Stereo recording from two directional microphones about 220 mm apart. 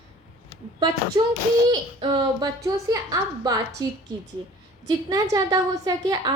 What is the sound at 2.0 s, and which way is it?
A woman's voice, 20° right (ahead or behind).